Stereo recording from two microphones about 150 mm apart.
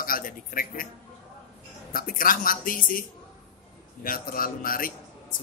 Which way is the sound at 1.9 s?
70° left (ahead or behind).